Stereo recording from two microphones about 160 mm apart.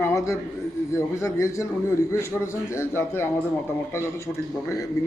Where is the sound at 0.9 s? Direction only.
20° left (ahead or behind).